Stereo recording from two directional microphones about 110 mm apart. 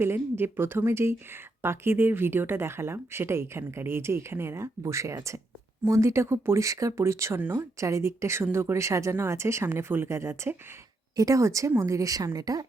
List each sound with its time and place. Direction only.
0.0 s a woman's voice: 20° right (ahead or behind)